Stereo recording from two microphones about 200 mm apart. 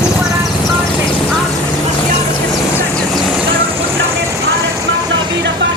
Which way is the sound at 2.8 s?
Centre (ahead or behind).